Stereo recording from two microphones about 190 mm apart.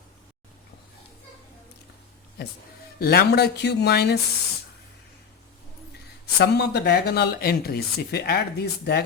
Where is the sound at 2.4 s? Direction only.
55° left (ahead or behind).